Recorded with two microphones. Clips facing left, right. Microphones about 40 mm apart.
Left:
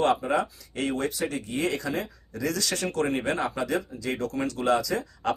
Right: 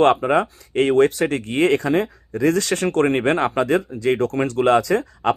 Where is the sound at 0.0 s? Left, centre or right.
Right.